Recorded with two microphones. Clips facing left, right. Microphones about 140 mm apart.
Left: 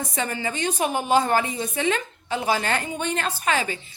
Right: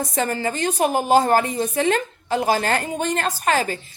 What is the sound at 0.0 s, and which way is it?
A woman's voice, 40° right (ahead or behind).